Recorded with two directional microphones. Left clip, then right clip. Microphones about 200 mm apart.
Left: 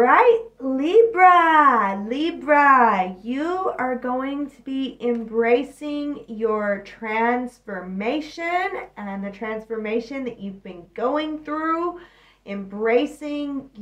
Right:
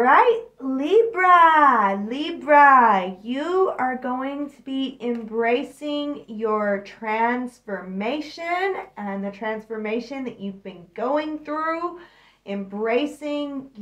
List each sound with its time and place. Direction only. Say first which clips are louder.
0.0 s a woman's voice: left 1 dB; 5° right (ahead or behind)